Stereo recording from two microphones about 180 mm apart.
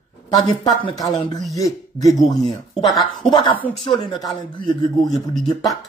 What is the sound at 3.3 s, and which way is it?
Speech, 25° left (ahead or behind).